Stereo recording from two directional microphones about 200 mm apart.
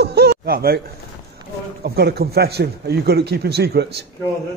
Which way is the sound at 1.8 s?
50° right (ahead or behind).